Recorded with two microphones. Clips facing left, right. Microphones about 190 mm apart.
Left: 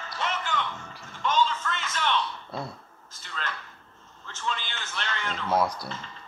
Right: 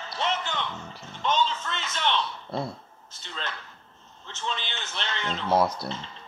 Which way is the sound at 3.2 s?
25° right (ahead or behind).